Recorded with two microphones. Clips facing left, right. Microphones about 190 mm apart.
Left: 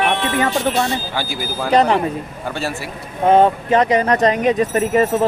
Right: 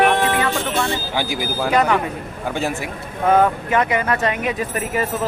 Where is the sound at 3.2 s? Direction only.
25° left (ahead or behind).